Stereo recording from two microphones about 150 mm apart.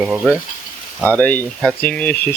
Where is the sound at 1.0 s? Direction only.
10° left (ahead or behind).